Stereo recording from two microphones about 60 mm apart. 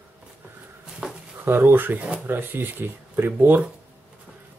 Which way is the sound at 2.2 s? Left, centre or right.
Right.